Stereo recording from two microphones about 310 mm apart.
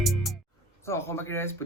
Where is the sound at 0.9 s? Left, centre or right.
Centre.